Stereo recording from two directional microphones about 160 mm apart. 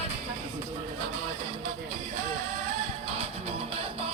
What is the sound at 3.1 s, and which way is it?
Music, 35° right (ahead or behind).